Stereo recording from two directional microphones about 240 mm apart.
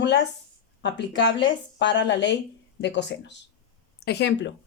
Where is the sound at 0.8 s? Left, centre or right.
Left.